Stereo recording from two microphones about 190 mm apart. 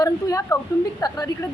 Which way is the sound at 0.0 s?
20° left (ahead or behind).